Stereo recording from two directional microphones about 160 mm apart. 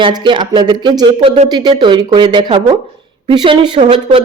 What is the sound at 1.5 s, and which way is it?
Speech, 25° right (ahead or behind).